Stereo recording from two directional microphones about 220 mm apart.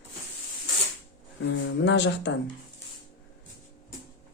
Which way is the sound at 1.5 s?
55° left (ahead or behind).